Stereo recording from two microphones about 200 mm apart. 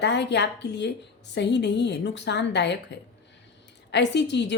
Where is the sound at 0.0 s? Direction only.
60° left (ahead or behind).